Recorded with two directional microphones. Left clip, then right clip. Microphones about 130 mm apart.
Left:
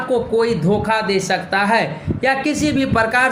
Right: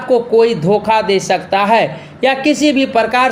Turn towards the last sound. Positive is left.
turn(degrees=-25)  # may be behind; listen again after turning